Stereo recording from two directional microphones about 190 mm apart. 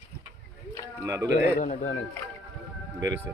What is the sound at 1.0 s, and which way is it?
Speech, 20° right (ahead or behind).